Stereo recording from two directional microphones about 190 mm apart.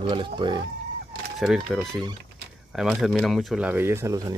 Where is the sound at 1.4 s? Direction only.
Centre (ahead or behind).